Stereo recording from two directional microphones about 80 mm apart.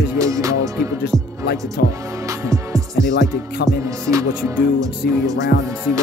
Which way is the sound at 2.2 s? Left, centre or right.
Right.